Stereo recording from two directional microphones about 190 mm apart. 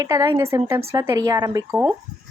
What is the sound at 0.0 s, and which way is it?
A woman's voice, 20° right (ahead or behind).